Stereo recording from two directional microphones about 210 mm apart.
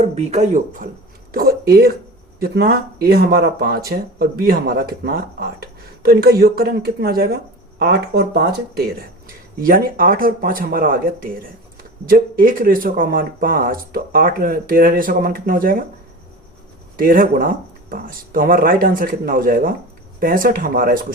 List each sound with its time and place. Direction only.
0.0 s speech: 30° right (ahead or behind)
17.0 s speech: 45° right (ahead or behind)